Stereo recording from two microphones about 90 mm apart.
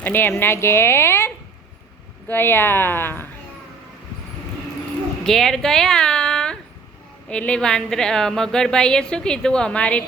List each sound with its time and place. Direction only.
0.0 s a woman's voice: 20° left (ahead or behind)
2.3 s a woman's voice: 25° left (ahead or behind)
5.2 s a woman's voice: 5° left (ahead or behind)